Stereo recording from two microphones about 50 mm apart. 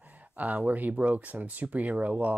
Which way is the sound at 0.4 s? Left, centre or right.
Right.